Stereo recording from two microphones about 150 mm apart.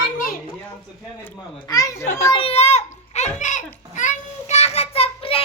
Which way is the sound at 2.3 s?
40° left (ahead or behind).